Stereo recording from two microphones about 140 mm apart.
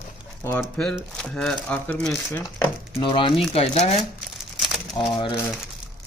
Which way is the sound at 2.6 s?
35° left (ahead or behind).